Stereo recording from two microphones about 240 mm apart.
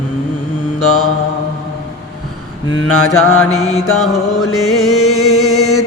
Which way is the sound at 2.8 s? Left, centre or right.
Left.